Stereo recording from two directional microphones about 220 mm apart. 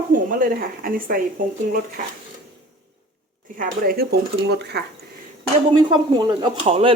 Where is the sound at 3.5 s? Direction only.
40° right (ahead or behind).